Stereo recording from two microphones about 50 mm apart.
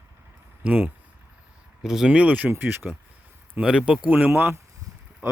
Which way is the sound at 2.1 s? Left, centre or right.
Right.